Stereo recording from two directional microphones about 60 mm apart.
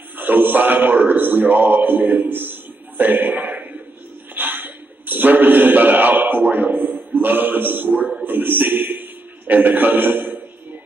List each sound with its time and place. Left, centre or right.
0.2 s a man's voice: right
4.4 s a sound: right
7.2 s a man's voice: right